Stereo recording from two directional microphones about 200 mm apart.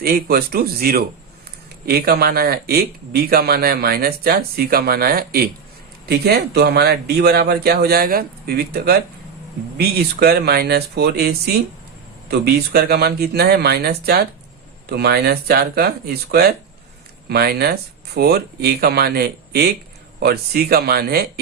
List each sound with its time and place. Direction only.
0.0 s speech: 50° right (ahead or behind)